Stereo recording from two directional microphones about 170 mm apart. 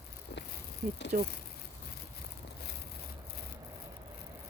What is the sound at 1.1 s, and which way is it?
Speech, 55° right (ahead or behind).